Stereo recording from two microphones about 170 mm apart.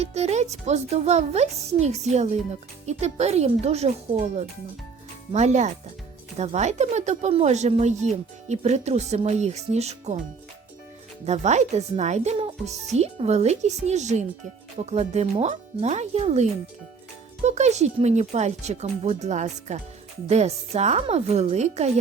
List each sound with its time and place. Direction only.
0.0 s speech: 40° right (ahead or behind)
11.3 s speech: 40° right (ahead or behind)